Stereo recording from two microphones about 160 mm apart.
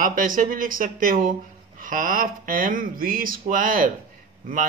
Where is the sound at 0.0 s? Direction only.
60° right (ahead or behind).